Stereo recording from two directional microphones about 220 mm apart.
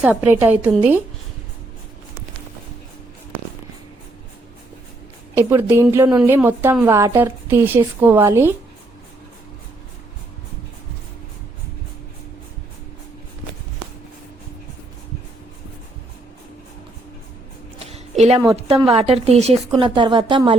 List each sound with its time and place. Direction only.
0.0 s a woman's voice: 5° right (ahead or behind)
5.3 s a woman's voice: 10° right (ahead or behind)
17.7 s a sound: 30° right (ahead or behind)
18.5 s speech: 25° right (ahead or behind)